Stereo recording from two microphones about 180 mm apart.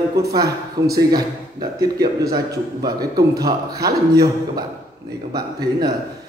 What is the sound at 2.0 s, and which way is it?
A man's voice, 20° right (ahead or behind).